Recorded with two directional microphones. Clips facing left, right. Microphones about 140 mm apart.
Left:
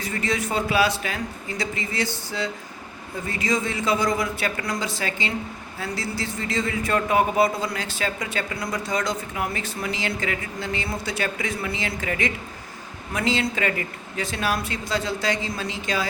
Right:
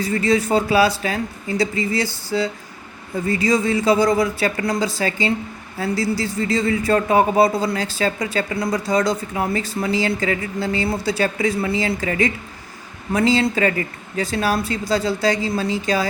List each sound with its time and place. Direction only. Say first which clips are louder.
0.0 s speech: right 8 dB; 35° right (ahead or behind)